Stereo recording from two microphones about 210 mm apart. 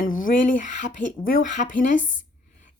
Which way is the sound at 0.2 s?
40° left (ahead or behind).